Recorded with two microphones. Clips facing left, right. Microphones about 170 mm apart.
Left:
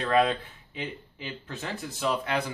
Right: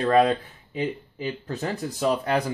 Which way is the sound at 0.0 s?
40° right (ahead or behind).